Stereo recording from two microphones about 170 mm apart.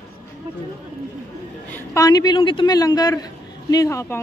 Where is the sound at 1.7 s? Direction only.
20° left (ahead or behind).